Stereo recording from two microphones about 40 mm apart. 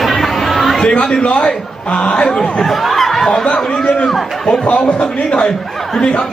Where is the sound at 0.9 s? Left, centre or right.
Left.